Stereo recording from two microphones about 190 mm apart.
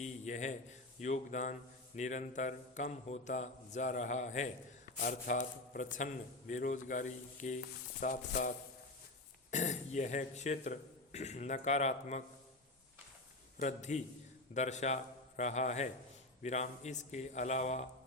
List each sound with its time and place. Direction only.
0.0 s a sound: 40° left (ahead or behind)
1.0 s a man's voice: 40° left (ahead or behind)
13.6 s a man's voice: 40° left (ahead or behind)